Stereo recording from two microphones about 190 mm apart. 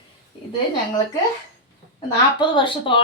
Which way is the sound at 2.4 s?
25° left (ahead or behind).